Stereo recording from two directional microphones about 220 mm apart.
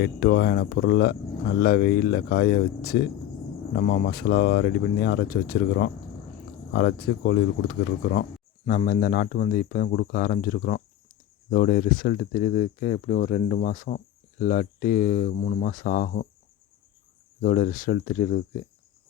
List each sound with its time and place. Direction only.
0.0 s speech: 45° left (ahead or behind)
17.4 s speech: 40° left (ahead or behind)